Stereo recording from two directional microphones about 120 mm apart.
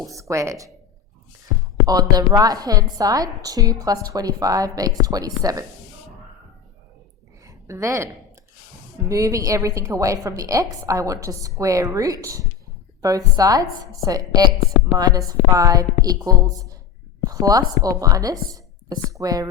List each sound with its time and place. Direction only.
0.1 s a woman's voice: 25° right (ahead or behind)
1.9 s a woman's voice: 30° right (ahead or behind)
7.4 s a woman's voice: 25° right (ahead or behind)